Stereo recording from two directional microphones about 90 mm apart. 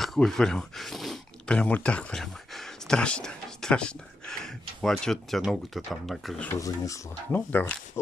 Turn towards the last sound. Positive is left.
turn(degrees=20)  # may be behind; listen again after turning